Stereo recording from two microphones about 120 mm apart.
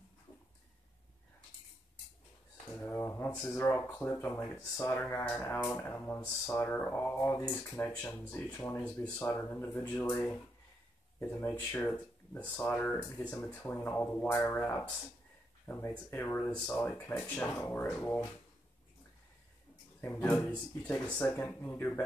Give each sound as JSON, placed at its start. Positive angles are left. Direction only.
{"t": 2.7, "sound": "speech", "side_deg": 20}
{"t": 20.0, "sound": "speech", "side_deg": 15}